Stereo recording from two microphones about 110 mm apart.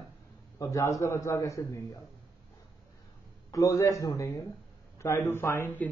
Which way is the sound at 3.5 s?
30° left (ahead or behind).